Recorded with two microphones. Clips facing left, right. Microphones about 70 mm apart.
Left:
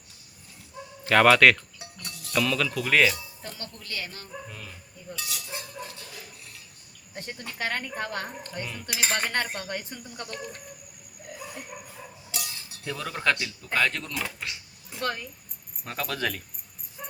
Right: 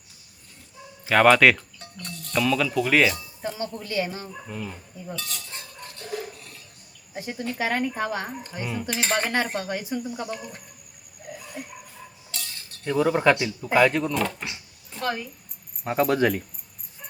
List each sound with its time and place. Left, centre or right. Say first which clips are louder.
1.0 s chink: right 1 dB; centre
1.8 s speech: right 3 dB; centre
3.4 s speech: right 15 dB; centre
5.1 s speech: left 1 dB; centre
7.1 s speech: right 7 dB; centre
8.9 s chink: right 3 dB; centre
10.2 s speech: right 4 dB; centre
12.3 s cutlery: left 2 dB; centre
12.8 s speech: right 8 dB; centre
14.1 s chink: right 8 dB; centre
14.9 s a woman's voice: right 2 dB; centre
15.8 s speech: right 10 dB; right